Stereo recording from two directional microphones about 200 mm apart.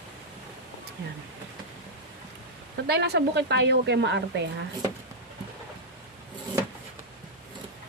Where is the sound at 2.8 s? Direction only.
55° right (ahead or behind).